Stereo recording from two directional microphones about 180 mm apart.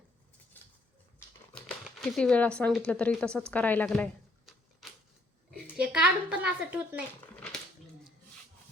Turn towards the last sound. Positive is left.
turn(degrees=5)  # may be behind; listen again after turning